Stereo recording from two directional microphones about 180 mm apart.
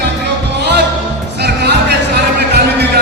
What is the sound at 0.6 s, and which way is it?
Music, 70° right (ahead or behind).